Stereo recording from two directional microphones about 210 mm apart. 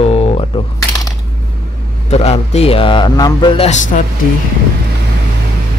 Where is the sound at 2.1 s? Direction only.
30° left (ahead or behind).